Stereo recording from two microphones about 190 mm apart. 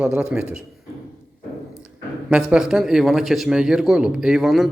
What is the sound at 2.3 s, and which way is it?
Speech, 5° right (ahead or behind).